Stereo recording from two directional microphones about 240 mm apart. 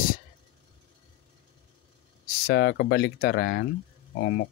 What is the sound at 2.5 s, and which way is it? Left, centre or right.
Speech, left.